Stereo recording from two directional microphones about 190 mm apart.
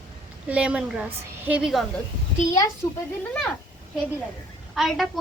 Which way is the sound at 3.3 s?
5° left (ahead or behind).